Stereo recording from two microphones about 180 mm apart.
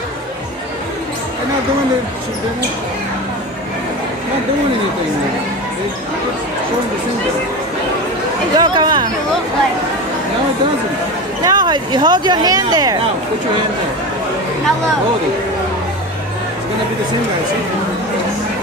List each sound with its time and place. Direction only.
8.5 s speech: 25° right (ahead or behind)
11.4 s speech: 25° right (ahead or behind)